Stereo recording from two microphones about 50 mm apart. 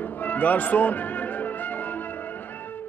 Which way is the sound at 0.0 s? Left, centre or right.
Left.